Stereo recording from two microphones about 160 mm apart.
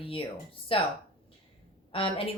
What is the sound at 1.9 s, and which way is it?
Speech, 35° left (ahead or behind).